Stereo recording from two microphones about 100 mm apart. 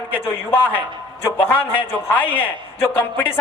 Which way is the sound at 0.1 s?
15° left (ahead or behind).